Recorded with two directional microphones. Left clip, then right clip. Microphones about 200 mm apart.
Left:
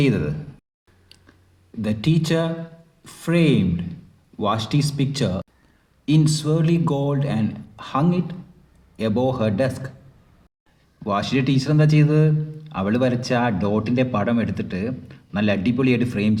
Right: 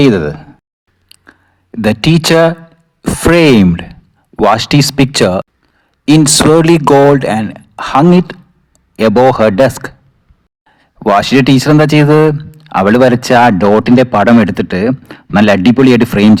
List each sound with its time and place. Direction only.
0.0 s speech: 40° right (ahead or behind)
1.0 s chewing: 40° right (ahead or behind)
1.8 s a man's voice: 50° right (ahead or behind)